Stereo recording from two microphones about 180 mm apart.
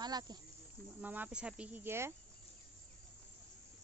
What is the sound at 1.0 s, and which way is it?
Speech, 10° right (ahead or behind).